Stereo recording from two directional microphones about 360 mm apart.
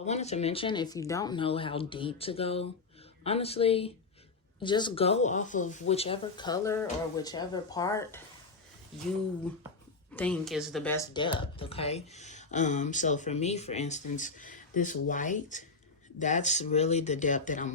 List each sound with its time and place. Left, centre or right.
0.0 s speech: centre
10.2 s speech: centre; by 17.7 s left